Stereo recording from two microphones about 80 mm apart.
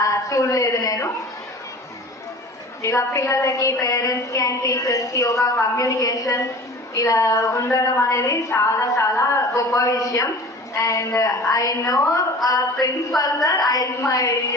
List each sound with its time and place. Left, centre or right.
0.0 s a woman's voice: left
2.8 s a woman's voice: left